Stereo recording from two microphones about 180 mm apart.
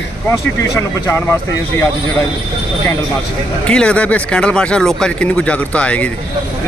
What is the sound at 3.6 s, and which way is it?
Speech, 5° left (ahead or behind).